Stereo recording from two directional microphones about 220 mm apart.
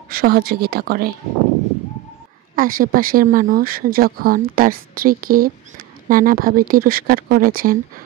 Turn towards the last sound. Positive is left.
turn(degrees=-40)  # may be behind; listen again after turning